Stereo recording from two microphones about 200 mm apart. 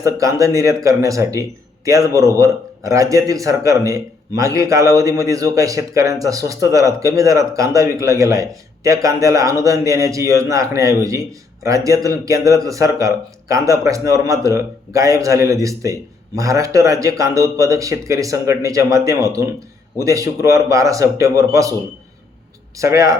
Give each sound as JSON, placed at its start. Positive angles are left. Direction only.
{"t": 0.0, "sound": "speech", "side_deg": -15}
{"t": 22.8, "sound": "speech", "side_deg": -15}